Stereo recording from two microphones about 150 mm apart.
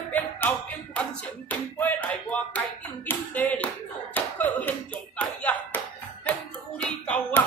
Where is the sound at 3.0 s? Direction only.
10° left (ahead or behind).